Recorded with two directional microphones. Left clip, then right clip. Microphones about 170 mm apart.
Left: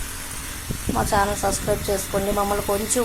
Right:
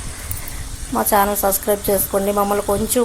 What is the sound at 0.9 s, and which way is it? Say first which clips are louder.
Speech: right 5 dB; 35° right (ahead or behind).